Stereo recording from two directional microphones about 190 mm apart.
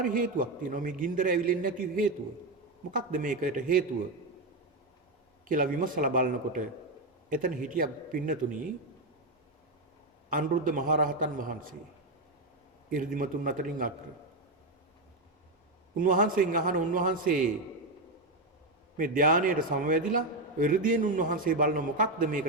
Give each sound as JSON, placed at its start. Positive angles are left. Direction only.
{"t": 0.0, "sound": "a man's voice", "side_deg": -45}
{"t": 5.5, "sound": "a man's voice", "side_deg": -45}
{"t": 10.2, "sound": "a man's voice", "side_deg": -45}
{"t": 12.9, "sound": "a man's voice", "side_deg": -45}
{"t": 16.0, "sound": "a man's voice", "side_deg": -45}
{"t": 18.9, "sound": "a man's voice", "side_deg": -45}